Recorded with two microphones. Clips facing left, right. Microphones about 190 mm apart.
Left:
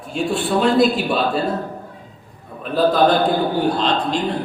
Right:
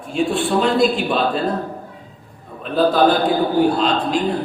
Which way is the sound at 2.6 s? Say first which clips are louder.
Right 1 dB; centre (ahead or behind).